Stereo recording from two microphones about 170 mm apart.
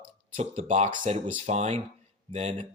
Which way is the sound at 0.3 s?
40° right (ahead or behind).